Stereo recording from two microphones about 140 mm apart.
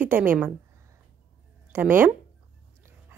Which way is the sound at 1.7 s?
15° right (ahead or behind).